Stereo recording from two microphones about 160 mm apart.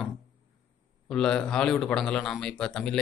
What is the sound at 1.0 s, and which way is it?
A man's voice, 5° left (ahead or behind).